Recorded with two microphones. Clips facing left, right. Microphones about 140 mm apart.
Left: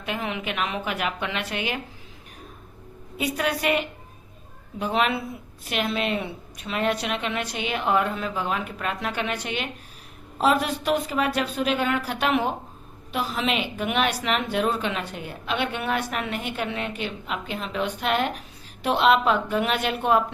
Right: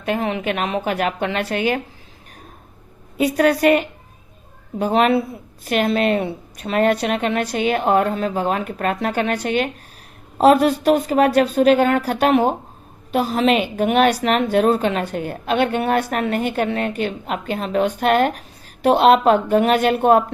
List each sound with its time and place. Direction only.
0.0 s speech: 45° right (ahead or behind)
3.2 s a woman's voice: 45° right (ahead or behind)